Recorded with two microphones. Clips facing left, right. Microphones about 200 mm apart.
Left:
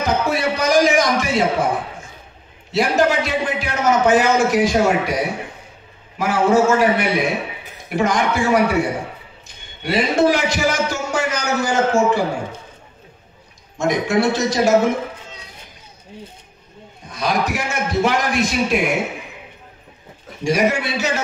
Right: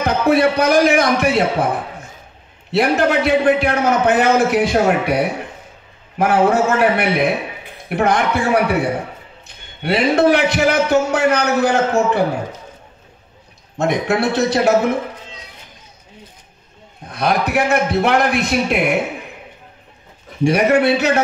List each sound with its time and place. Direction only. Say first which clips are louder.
0.0 s a man's voice: right 5 dB; 60° right (ahead or behind)
2.7 s a man's voice: right 2 dB; 60° right (ahead or behind)
9.8 s a man's voice: right 3 dB; 60° right (ahead or behind)
13.7 s a man's voice: right 1 dB; 60° right (ahead or behind)
17.1 s a man's voice: right 3 dB; 60° right (ahead or behind)
20.4 s a man's voice: right 5 dB; 60° right (ahead or behind)